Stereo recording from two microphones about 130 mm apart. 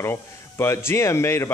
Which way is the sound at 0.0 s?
20° left (ahead or behind).